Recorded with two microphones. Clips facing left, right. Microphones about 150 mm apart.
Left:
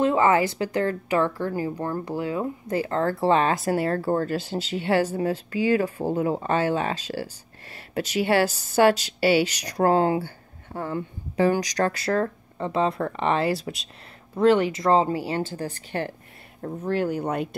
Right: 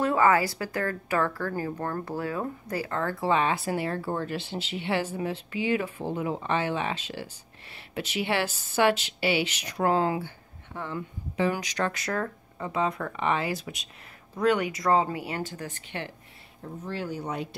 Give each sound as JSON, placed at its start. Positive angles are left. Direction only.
{"t": 0.0, "sound": "speech", "side_deg": 20}
{"t": 16.6, "sound": "speech", "side_deg": 55}